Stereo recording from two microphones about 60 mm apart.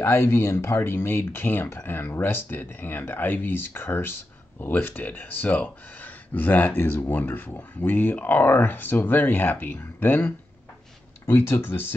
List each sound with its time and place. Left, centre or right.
0.0 s speech: left
0.7 s speech: left